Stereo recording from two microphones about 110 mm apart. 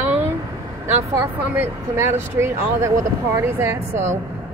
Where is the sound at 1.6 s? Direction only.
25° right (ahead or behind).